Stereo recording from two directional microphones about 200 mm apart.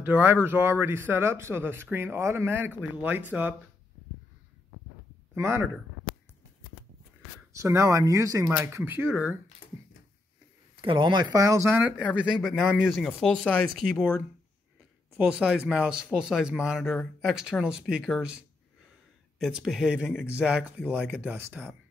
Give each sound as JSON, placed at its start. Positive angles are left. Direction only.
{"t": 0.0, "sound": "speech", "side_deg": -10}
{"t": 5.3, "sound": "speech", "side_deg": -10}
{"t": 7.5, "sound": "speech", "side_deg": -15}
{"t": 10.8, "sound": "speech", "side_deg": -25}
{"t": 15.2, "sound": "speech", "side_deg": -5}